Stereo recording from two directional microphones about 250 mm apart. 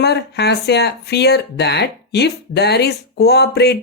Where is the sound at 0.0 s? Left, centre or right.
Left.